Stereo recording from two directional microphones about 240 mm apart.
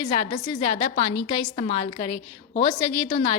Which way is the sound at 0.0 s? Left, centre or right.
Left.